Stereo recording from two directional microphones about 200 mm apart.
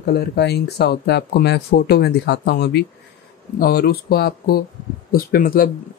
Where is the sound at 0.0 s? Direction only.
55° left (ahead or behind).